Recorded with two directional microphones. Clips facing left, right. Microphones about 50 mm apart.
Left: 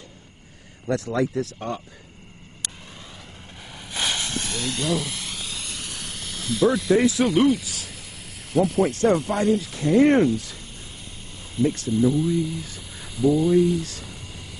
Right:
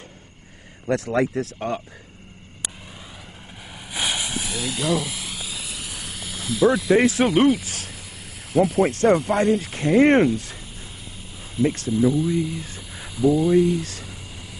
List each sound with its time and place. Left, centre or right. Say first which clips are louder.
0.8 s speech: right 2 dB; right
2.6 s vehicle: right 1 dB; centre
3.6 s a sound: right 1 dB; centre
7.2 s speech: right 1 dB; centre
7.6 s snake: right 1 dB; right
8.5 s speech: right 2 dB; centre
9.6 s speech: right 1 dB; right
11.6 s speech: right 1 dB; centre